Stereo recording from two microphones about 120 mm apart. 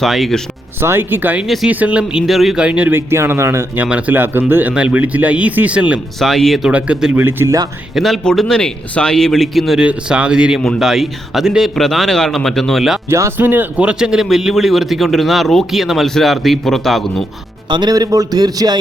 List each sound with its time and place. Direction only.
0.0 s speech: centre (ahead or behind)
0.8 s speech: 20° right (ahead or behind)
6.1 s speech: centre (ahead or behind)
6.7 s speech: 10° right (ahead or behind)
7.9 s speech: centre (ahead or behind)
13.1 s speech: 20° right (ahead or behind); by 17.2 s centre (ahead or behind)
17.7 s a man's voice: 35° right (ahead or behind)